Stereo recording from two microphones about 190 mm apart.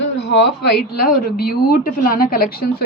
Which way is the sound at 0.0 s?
65° left (ahead or behind).